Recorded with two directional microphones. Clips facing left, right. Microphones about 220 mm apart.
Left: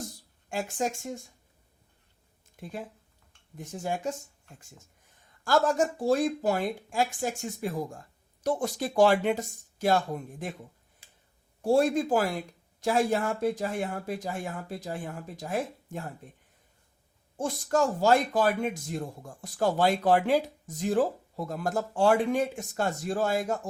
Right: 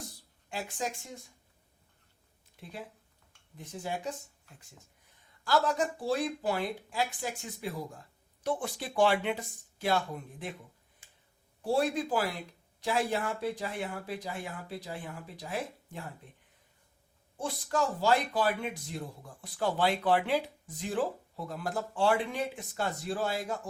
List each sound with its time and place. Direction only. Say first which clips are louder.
0.5 s speech: left 6 dB; 45° left (ahead or behind)
2.6 s speech: left 5 dB; 45° left (ahead or behind)
5.5 s speech: left 4 dB; 45° left (ahead or behind)
11.6 s speech: left 6 dB; 45° left (ahead or behind)
17.3 s speech: left 5 dB; 45° left (ahead or behind)